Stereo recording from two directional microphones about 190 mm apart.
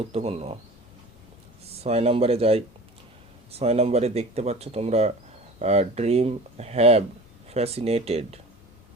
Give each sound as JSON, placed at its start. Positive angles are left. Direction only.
{"t": 0.0, "sound": "speech", "side_deg": -30}
{"t": 1.8, "sound": "speech", "side_deg": -30}